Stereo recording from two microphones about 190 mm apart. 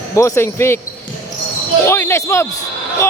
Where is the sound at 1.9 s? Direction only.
15° left (ahead or behind).